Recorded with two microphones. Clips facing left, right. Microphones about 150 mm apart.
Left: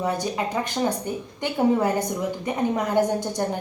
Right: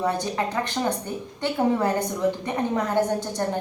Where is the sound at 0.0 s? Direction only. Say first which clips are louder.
Even; 10° left (ahead or behind).